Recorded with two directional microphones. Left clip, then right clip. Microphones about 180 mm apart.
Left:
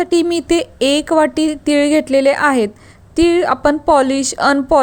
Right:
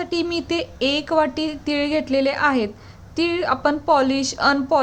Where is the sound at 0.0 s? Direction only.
40° left (ahead or behind).